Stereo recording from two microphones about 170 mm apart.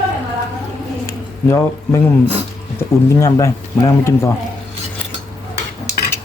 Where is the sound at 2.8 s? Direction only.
20° left (ahead or behind).